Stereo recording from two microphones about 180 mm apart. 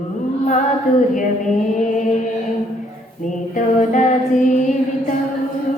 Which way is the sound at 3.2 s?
45° left (ahead or behind).